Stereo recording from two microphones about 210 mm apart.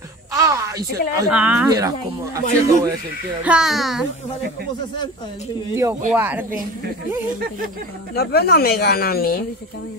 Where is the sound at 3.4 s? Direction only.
5° right (ahead or behind).